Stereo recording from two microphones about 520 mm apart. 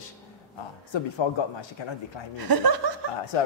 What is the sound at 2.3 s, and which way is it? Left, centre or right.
Speech, right.